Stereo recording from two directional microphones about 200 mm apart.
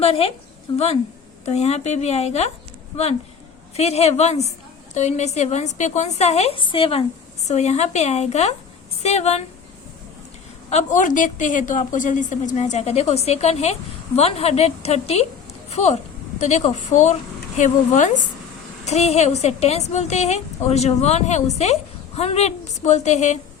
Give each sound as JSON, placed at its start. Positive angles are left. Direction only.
{"t": 0.0, "sound": "a woman's voice", "side_deg": 30}
{"t": 1.5, "sound": "a woman's voice", "side_deg": 35}
{"t": 10.7, "sound": "a woman's voice", "side_deg": 35}